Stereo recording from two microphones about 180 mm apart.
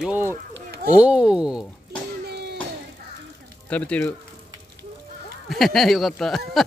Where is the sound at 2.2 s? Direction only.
65° right (ahead or behind).